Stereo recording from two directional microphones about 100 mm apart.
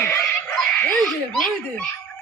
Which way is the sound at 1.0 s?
Centre (ahead or behind).